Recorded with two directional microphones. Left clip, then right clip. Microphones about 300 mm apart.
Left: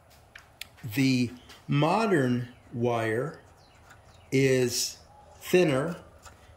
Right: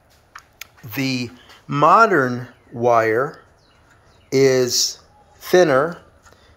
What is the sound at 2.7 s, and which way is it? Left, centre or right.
Speech, right.